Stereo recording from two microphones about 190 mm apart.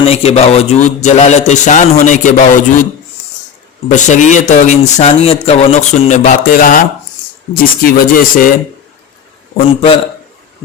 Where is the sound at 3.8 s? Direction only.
40° left (ahead or behind).